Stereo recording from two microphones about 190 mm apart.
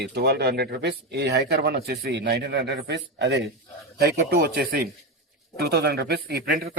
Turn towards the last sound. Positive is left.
turn(degrees=-55)  # may be behind; listen again after turning